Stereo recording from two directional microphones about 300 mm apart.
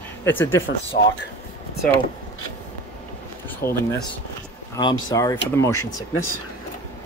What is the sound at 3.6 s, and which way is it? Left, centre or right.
Speech, left.